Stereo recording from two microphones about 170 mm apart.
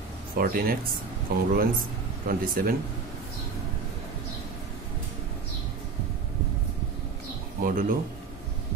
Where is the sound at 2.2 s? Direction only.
60° right (ahead or behind).